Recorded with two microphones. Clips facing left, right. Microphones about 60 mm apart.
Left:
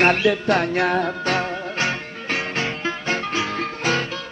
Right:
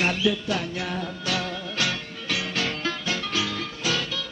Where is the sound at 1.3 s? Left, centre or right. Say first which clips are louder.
Left 5 dB; left.